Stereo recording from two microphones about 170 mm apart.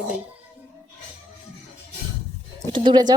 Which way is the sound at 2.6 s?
30° right (ahead or behind).